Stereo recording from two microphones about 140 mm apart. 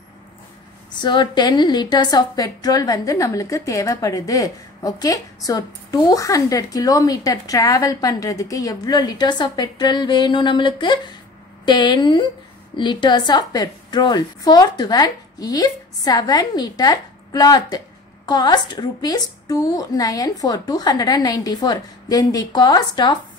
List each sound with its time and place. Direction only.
0.9 s a woman's voice: 35° left (ahead or behind)